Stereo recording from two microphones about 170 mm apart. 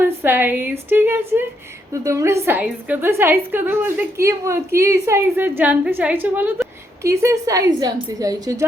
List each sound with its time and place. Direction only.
0.0 s a woman's voice: 10° right (ahead or behind)